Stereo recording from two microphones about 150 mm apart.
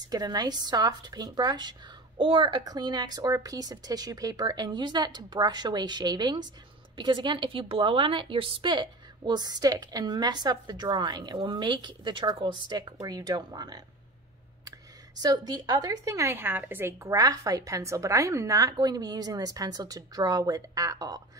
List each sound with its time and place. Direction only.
0.1 s a woman's voice: 25° right (ahead or behind)
15.2 s speech: 30° right (ahead or behind)